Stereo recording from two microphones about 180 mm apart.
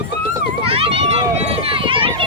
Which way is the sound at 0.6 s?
30° right (ahead or behind).